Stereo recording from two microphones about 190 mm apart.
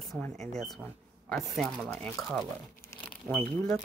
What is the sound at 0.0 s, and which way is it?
Speech, centre (ahead or behind).